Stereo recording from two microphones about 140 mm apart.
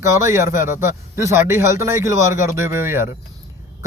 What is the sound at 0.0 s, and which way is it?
Speech, 20° right (ahead or behind).